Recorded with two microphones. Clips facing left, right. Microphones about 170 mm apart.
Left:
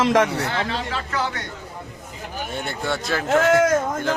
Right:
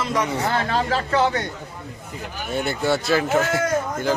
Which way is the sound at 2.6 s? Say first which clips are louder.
Right 6 dB; 5° right (ahead or behind).